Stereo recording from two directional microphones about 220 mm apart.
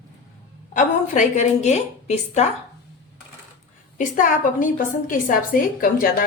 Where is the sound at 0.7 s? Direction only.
35° left (ahead or behind).